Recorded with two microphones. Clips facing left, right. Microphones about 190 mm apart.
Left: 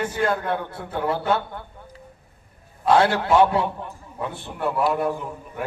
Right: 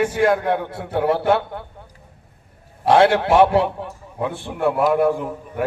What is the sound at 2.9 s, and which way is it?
A man's voice, 70° right (ahead or behind).